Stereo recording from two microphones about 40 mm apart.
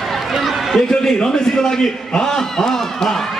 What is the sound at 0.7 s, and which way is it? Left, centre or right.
A man's voice, centre.